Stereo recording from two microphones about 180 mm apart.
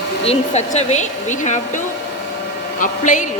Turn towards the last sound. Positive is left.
turn(degrees=45)  # may be behind; listen again after turning